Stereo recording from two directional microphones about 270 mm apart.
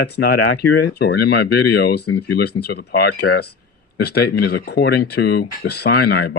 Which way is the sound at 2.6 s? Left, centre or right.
Left.